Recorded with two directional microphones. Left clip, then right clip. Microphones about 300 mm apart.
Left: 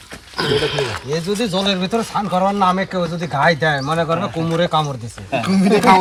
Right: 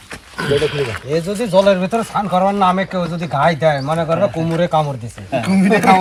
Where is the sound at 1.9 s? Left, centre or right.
Centre.